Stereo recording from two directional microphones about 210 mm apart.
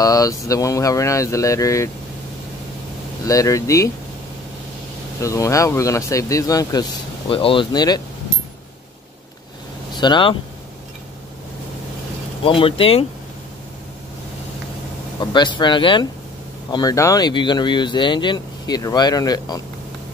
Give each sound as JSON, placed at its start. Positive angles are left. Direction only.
{"t": 0.0, "sound": "speech", "side_deg": 15}
{"t": 3.3, "sound": "speech", "side_deg": 15}
{"t": 5.2, "sound": "speech", "side_deg": 15}
{"t": 9.9, "sound": "speech", "side_deg": 20}
{"t": 12.4, "sound": "speech", "side_deg": 25}
{"t": 15.1, "sound": "speech", "side_deg": 20}